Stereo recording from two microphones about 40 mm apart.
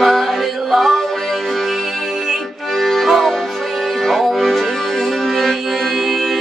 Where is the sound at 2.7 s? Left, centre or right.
Centre.